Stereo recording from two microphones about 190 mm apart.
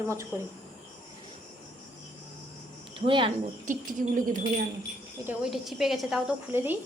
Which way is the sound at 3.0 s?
25° right (ahead or behind).